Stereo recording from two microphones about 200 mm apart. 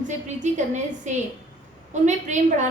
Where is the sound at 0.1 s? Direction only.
35° right (ahead or behind).